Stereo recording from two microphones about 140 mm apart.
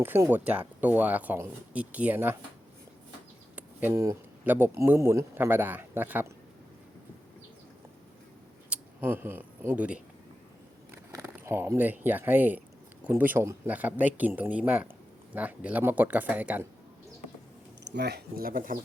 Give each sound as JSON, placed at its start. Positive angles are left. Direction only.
{"t": 0.0, "sound": "speech", "side_deg": -15}
{"t": 3.5, "sound": "speech", "side_deg": -15}
{"t": 8.7, "sound": "speech", "side_deg": -15}
{"t": 10.9, "sound": "speech", "side_deg": -20}
{"t": 18.3, "sound": "speech", "side_deg": -90}